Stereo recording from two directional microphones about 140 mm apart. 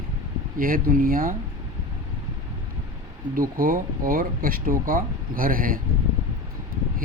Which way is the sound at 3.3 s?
90° right.